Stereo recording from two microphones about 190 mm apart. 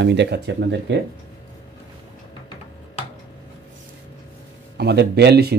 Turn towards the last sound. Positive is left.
turn(degrees=-60)  # may be behind; listen again after turning